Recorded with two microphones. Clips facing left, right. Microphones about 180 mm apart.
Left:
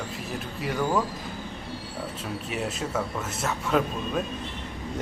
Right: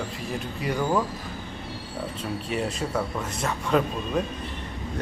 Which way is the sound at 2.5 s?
5° left (ahead or behind).